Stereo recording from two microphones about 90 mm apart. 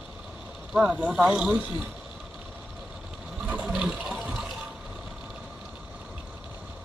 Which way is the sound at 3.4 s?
15° right (ahead or behind).